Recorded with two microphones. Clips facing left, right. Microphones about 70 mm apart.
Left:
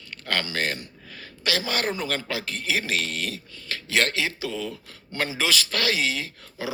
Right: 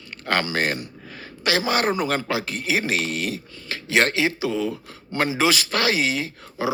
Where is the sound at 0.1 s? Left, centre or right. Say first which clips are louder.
Right 5 dB; centre.